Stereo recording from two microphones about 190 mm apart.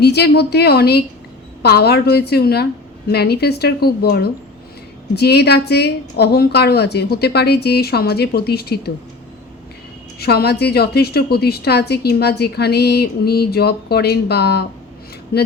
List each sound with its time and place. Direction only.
0.0 s a woman's voice: 60° left (ahead or behind)
10.2 s a woman's voice: 55° left (ahead or behind)